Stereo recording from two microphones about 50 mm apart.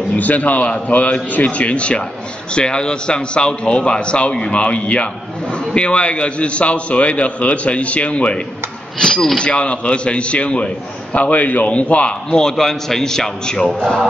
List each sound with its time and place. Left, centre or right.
0.1 s a man's voice: left; by 13.7 s centre